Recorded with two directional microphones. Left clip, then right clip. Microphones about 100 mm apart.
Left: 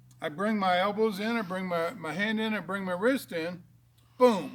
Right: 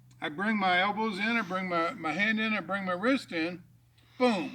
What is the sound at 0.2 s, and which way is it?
Speech, 30° left (ahead or behind).